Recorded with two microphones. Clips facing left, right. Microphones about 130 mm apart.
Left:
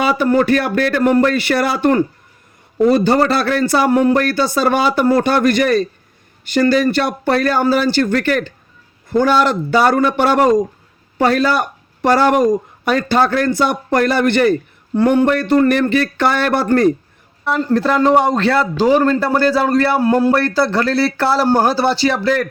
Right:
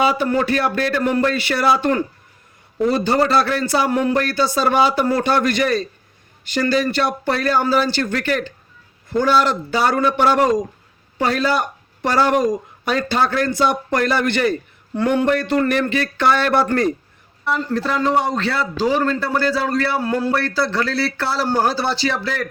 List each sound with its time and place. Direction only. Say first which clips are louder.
0.2 s a man's voice: left 5 dB; 45° left (ahead or behind)
17.4 s a man's voice: left 5 dB; 55° left (ahead or behind)
21.7 s a man's voice: left 5 dB; 55° left (ahead or behind)